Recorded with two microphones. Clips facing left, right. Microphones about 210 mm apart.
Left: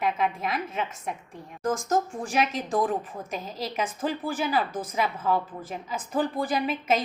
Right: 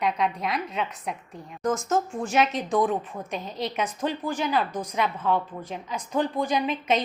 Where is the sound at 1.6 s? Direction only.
30° left (ahead or behind).